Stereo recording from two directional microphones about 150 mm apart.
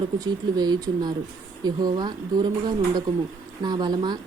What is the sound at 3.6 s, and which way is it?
Speech, 30° right (ahead or behind).